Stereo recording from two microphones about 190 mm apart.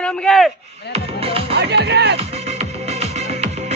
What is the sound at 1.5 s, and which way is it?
Music, 60° right (ahead or behind).